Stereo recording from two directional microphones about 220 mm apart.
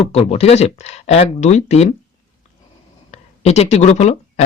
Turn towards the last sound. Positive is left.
turn(degrees=30)  # may be behind; listen again after turning